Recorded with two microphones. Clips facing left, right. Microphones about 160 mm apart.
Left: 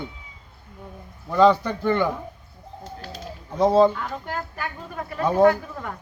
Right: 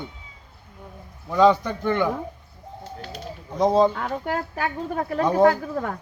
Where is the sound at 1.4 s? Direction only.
15° right (ahead or behind).